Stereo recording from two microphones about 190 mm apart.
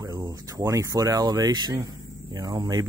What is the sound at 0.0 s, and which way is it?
Speech, 20° right (ahead or behind).